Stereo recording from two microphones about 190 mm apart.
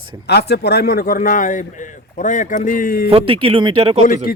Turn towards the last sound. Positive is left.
turn(degrees=45)  # may be behind; listen again after turning